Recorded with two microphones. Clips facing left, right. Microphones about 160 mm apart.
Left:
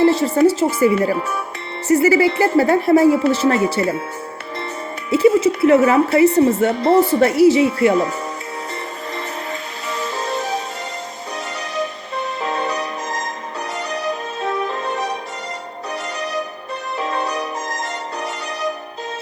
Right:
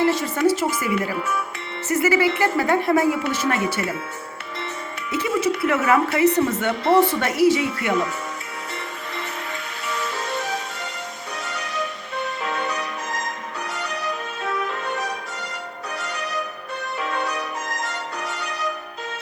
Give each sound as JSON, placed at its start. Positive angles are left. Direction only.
{"t": 0.0, "sound": "a woman's voice", "side_deg": 30}
{"t": 5.1, "sound": "a woman's voice", "side_deg": 30}
{"t": 10.0, "sound": "music", "side_deg": 35}
{"t": 11.8, "sound": "music", "side_deg": 35}
{"t": 17.0, "sound": "music", "side_deg": 35}